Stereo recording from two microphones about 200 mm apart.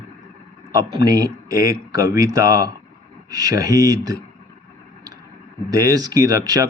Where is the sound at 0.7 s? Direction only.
20° right (ahead or behind).